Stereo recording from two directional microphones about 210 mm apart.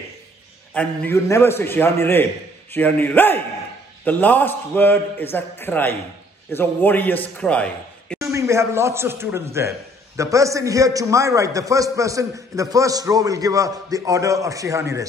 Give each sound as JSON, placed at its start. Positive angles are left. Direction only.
{"t": 0.7, "sound": "a man's voice", "side_deg": 10}
{"t": 8.2, "sound": "a man's voice", "side_deg": -15}